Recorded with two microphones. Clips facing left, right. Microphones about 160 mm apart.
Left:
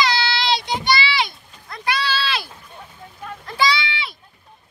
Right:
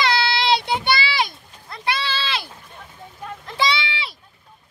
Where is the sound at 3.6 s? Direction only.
25° right (ahead or behind).